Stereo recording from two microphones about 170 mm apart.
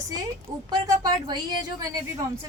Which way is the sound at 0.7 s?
25° right (ahead or behind).